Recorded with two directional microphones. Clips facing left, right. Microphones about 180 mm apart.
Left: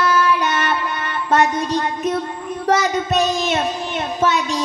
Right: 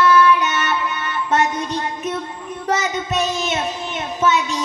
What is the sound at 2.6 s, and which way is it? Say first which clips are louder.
Child singing: left 4 dB; 35° left (ahead or behind).